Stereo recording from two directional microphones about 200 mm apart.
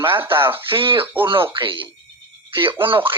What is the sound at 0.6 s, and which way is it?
Speech, 25° right (ahead or behind).